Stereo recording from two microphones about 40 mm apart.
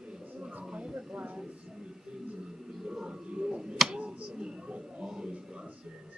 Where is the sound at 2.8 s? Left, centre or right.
Centre.